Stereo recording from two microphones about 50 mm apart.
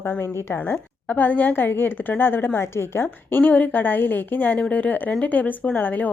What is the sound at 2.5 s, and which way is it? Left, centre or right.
Speech, left.